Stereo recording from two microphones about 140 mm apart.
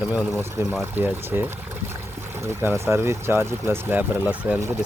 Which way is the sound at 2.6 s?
20° right (ahead or behind).